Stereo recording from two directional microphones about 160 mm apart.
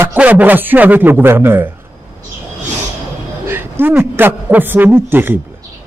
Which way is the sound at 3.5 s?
15° right (ahead or behind).